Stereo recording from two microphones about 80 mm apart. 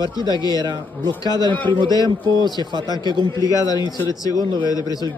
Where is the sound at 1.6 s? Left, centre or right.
Right.